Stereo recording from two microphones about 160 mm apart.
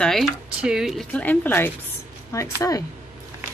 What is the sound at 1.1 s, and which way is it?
Speech, 10° left (ahead or behind).